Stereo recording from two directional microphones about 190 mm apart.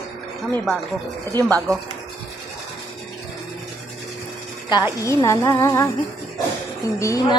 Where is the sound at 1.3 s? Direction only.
20° right (ahead or behind).